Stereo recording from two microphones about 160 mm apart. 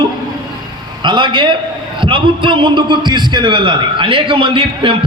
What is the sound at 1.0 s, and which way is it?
A man's voice, 30° right (ahead or behind).